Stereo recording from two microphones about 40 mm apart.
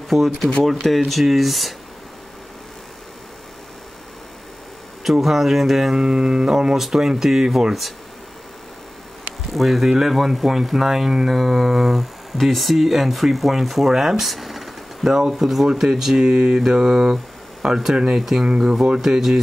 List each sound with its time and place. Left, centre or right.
0.1 s speech: centre
0.8 s speech: centre
5.0 s speech: centre
9.5 s speech: centre
17.9 s speech: right
18.2 s speech: centre